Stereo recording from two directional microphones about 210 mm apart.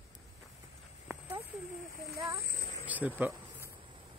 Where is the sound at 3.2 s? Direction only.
10° right (ahead or behind).